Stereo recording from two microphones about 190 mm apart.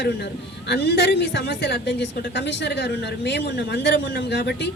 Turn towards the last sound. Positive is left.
turn(degrees=60)  # may be behind; listen again after turning